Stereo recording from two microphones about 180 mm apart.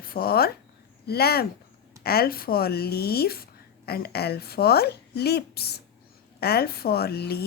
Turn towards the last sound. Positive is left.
turn(degrees=60)  # may be behind; listen again after turning